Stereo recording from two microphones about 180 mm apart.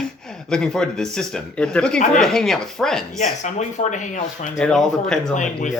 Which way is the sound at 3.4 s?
40° left (ahead or behind).